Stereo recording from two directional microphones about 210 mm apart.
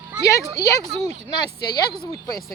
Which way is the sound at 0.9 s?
30° right (ahead or behind).